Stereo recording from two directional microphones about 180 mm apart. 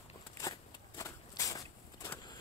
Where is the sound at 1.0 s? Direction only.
20° left (ahead or behind).